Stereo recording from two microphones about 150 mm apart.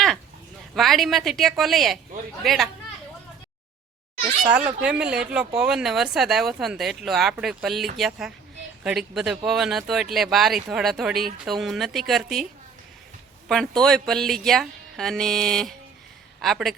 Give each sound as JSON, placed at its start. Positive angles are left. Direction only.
{"t": 0.8, "sound": "speech", "side_deg": 0}
{"t": 4.5, "sound": "speech", "side_deg": -5}
{"t": 13.5, "sound": "speech", "side_deg": 5}